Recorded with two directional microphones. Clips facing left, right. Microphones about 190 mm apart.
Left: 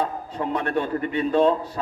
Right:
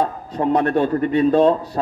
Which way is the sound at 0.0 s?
40° right (ahead or behind).